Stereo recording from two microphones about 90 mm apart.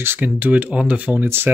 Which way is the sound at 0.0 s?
20° right (ahead or behind).